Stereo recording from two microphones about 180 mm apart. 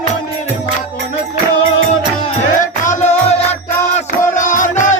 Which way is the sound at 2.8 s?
45° left (ahead or behind).